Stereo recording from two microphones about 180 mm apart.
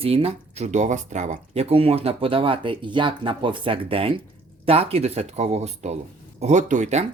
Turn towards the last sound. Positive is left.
turn(degrees=-40)  # may be behind; listen again after turning